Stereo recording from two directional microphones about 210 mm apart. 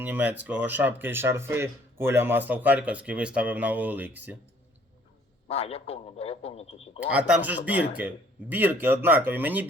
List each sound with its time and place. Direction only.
0.0 s speech: 10° right (ahead or behind)
5.5 s a man's voice: 30° left (ahead or behind)
7.1 s speech: 5° right (ahead or behind)